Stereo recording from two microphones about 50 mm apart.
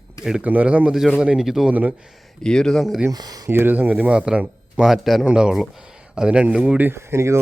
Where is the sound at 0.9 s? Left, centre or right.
Centre.